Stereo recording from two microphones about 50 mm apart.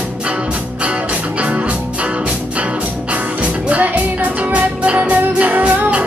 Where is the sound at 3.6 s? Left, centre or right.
Right.